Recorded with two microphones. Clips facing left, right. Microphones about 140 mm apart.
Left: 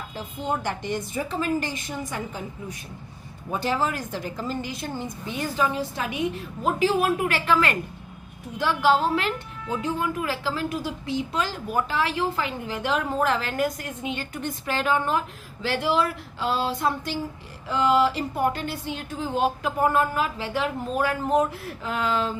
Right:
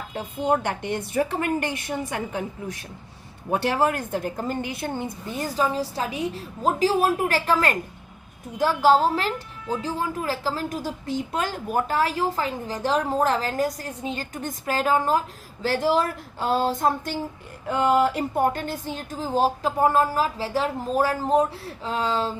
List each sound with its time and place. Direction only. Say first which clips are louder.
0.1 s a woman's voice: right 6 dB; 65° right (ahead or behind)
5.3 s a woman's voice: right 1 dB; 40° right (ahead or behind)